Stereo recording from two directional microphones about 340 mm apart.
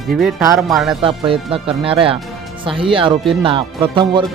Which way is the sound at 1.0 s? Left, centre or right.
Centre.